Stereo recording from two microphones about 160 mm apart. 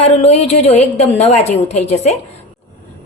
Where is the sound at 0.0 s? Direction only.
40° left (ahead or behind).